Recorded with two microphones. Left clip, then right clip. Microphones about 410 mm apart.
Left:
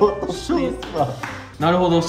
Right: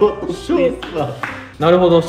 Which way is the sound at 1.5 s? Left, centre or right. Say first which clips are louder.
Right 6 dB; centre.